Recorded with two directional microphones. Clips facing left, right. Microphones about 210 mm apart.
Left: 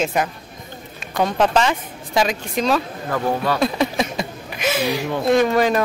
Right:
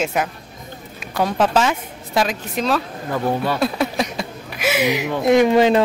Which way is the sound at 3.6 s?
Centre (ahead or behind).